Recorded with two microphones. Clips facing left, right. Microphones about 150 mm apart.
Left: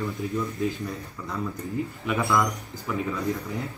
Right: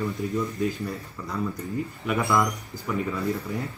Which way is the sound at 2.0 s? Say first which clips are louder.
Right 1 dB; centre (ahead or behind).